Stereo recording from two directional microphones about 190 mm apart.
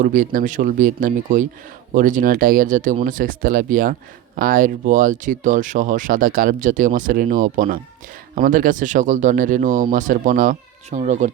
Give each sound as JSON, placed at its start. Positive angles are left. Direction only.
{"t": 0.0, "sound": "speech", "side_deg": -45}